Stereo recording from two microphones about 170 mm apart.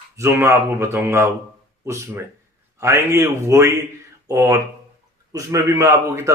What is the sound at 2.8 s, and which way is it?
Speech, 15° right (ahead or behind).